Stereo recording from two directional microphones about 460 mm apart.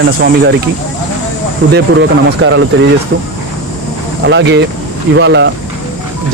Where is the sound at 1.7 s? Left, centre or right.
Right.